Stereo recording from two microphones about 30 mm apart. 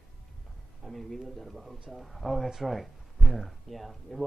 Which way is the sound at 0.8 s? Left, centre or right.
Centre.